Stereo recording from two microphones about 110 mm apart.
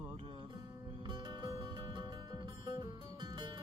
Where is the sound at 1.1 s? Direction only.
40° right (ahead or behind).